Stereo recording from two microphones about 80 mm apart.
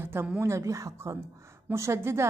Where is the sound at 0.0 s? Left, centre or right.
Right.